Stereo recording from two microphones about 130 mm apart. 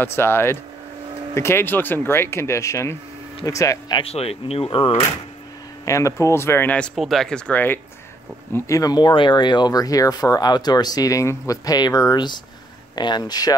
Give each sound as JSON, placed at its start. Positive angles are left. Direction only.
{"t": 0.0, "sound": "speech", "side_deg": 20}
{"t": 4.0, "sound": "speech", "side_deg": 50}
{"t": 5.9, "sound": "speech", "side_deg": 25}
{"t": 7.0, "sound": "speech", "side_deg": 0}
{"t": 8.5, "sound": "speech", "side_deg": 25}